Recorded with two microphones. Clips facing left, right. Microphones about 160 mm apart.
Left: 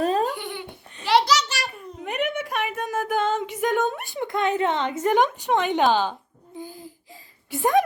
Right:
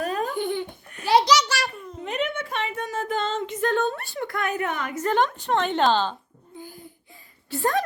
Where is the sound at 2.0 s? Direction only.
65° left (ahead or behind).